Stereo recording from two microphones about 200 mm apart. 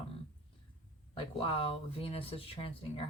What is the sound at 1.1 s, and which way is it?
Speech, 25° left (ahead or behind).